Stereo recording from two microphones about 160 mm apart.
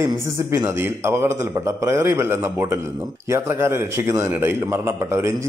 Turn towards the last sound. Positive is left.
turn(degrees=-15)  # may be behind; listen again after turning